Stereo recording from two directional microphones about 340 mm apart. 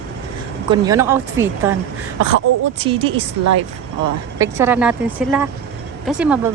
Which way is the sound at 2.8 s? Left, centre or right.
Centre.